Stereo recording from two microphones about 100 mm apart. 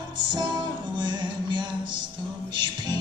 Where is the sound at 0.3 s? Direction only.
50° right (ahead or behind).